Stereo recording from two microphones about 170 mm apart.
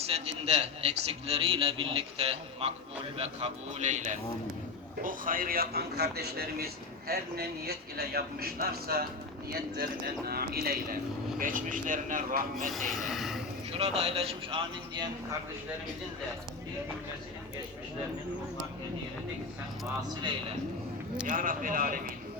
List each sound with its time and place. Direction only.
0.0 s a man's voice: 35° right (ahead or behind); by 12.7 s 55° right (ahead or behind)
13.0 s speech: centre (ahead or behind)
13.7 s a man's voice: 35° right (ahead or behind)
20.0 s a man's voice: 25° right (ahead or behind)
21.2 s speech: 50° right (ahead or behind)